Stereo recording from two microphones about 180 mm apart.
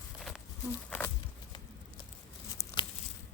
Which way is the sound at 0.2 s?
5° left (ahead or behind).